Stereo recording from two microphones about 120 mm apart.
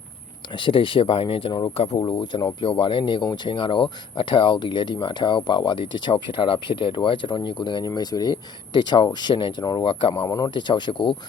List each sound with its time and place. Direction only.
0.6 s speech: 45° left (ahead or behind)
2.0 s speech: 40° left (ahead or behind)
10.2 s speech: 30° left (ahead or behind)